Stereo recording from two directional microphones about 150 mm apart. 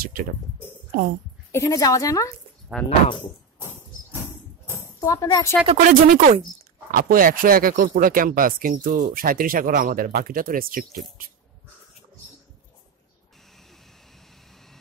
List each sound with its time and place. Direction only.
0.0 s speech: 75° right (ahead or behind)
1.5 s a woman's voice: 25° left (ahead or behind)
2.8 s speech: 10° left (ahead or behind)
5.0 s a woman's voice: 20° left (ahead or behind)
5.7 s speech: 55° right (ahead or behind)
6.9 s speech: 70° right (ahead or behind)